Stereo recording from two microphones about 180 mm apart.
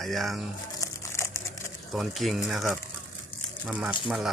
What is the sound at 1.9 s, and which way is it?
Speech, centre (ahead or behind).